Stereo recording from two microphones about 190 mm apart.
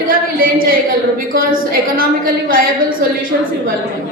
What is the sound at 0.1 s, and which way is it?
A woman's voice, 50° right (ahead or behind).